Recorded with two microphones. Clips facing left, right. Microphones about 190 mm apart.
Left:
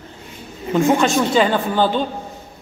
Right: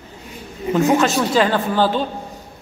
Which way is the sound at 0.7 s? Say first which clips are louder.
Left 1 dB; centre (ahead or behind).